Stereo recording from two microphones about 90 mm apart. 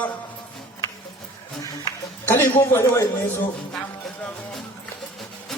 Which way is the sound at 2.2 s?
25° left (ahead or behind).